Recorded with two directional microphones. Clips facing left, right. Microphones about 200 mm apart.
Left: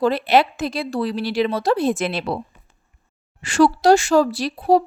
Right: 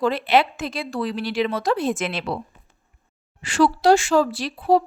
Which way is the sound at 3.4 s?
45° left (ahead or behind).